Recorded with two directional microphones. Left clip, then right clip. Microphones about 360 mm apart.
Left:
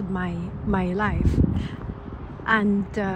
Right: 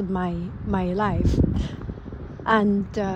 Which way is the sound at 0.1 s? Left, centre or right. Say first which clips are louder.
Right 2 dB; centre.